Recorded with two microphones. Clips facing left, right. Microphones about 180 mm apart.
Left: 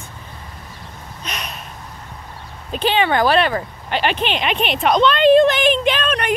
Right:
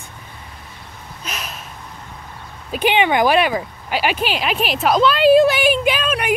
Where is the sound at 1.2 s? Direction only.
5° right (ahead or behind).